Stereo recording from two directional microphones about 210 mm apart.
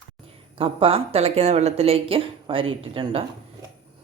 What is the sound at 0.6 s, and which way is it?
Speech, 25° right (ahead or behind).